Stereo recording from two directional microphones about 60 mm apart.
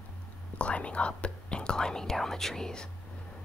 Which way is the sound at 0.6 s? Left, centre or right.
Left.